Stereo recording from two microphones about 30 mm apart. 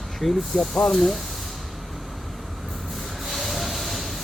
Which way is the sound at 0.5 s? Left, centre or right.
Left.